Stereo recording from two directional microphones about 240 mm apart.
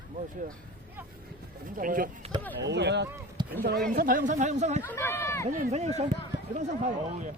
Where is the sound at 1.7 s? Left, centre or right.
Right.